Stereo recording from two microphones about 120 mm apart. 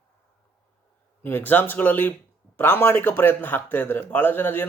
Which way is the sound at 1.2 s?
15° left (ahead or behind).